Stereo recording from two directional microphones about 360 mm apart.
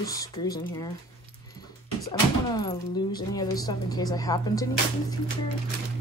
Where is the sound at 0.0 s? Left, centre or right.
Centre.